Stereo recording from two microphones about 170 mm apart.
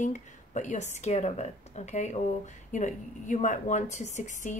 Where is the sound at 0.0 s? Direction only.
45° left (ahead or behind).